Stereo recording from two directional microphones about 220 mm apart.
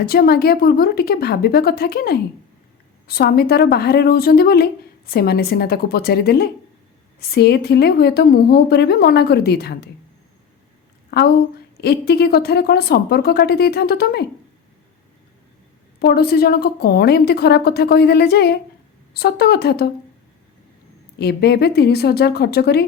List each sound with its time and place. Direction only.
0.0 s a woman's voice: 45° left (ahead or behind)
11.1 s a woman's voice: 45° left (ahead or behind)
16.0 s a woman's voice: 45° left (ahead or behind)
21.2 s a woman's voice: 50° left (ahead or behind)